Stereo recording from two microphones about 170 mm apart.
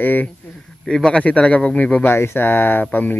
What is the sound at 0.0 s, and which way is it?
Speech, 10° left (ahead or behind).